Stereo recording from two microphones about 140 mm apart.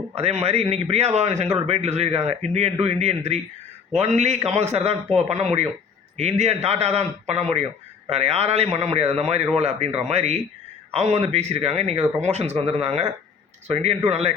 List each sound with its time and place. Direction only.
0.1 s speech: 50° right (ahead or behind)
14.1 s speech: 50° right (ahead or behind)